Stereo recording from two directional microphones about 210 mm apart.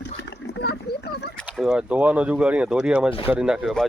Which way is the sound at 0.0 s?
55° left (ahead or behind).